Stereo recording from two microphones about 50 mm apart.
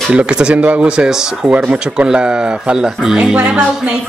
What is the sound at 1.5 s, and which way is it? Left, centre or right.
Speech, right.